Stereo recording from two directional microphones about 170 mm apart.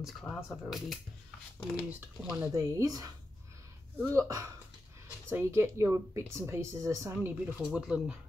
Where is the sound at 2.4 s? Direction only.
20° right (ahead or behind).